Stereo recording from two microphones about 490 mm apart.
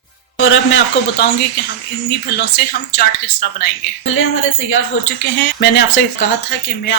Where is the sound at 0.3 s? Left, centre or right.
Left.